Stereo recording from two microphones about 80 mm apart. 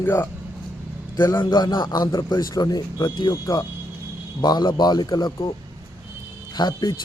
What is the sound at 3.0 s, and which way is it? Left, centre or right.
Speech, left.